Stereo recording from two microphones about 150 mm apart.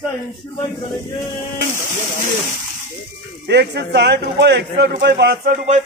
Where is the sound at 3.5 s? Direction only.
90° right.